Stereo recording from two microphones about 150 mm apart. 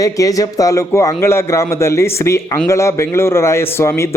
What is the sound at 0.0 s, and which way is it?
A man's voice, 25° left (ahead or behind).